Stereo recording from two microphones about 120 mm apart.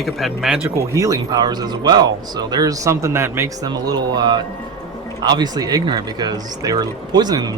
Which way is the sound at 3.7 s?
35° right (ahead or behind).